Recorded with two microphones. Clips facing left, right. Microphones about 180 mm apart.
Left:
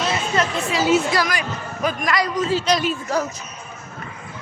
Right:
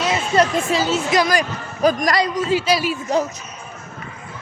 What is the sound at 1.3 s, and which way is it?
Speech, 40° right (ahead or behind).